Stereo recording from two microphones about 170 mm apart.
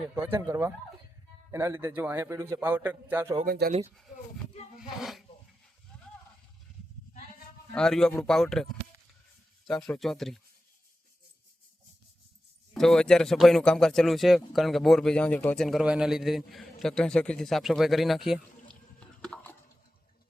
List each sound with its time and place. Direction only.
0.1 s a man's voice: 15° right (ahead or behind)
3.4 s speech: 60° right (ahead or behind)
4.8 s speech: centre (ahead or behind)
7.7 s speech: 5° left (ahead or behind)
12.7 s speech: 5° left (ahead or behind)